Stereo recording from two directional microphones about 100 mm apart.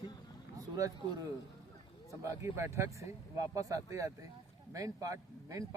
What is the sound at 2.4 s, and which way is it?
Speech, 25° right (ahead or behind).